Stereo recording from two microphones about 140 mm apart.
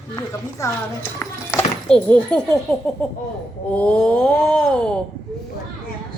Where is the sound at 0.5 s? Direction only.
20° left (ahead or behind).